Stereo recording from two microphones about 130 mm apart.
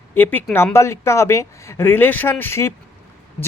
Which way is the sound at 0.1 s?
15° left (ahead or behind).